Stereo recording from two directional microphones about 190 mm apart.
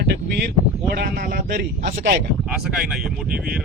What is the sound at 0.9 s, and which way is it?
Speech, 50° right (ahead or behind).